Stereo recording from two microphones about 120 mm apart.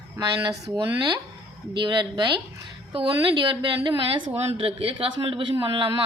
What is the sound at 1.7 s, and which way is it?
Speech, 40° right (ahead or behind).